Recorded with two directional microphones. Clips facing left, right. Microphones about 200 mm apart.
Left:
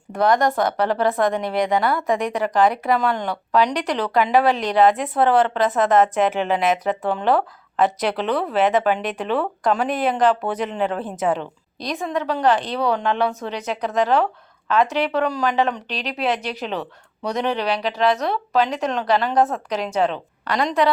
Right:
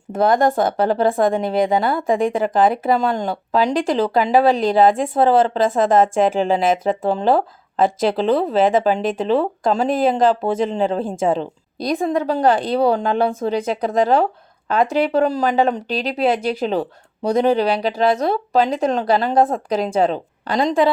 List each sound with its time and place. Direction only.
0.1 s speech: 25° right (ahead or behind)